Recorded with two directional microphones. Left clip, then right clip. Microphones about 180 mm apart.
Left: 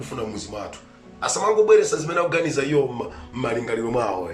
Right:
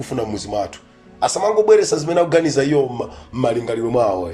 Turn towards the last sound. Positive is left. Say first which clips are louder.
# right 6 dB
turn(degrees=-25)  # may be behind; listen again after turning